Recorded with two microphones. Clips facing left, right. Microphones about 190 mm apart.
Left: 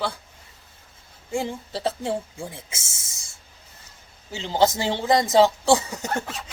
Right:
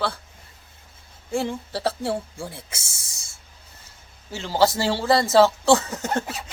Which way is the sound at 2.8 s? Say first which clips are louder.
Even; 15° right (ahead or behind).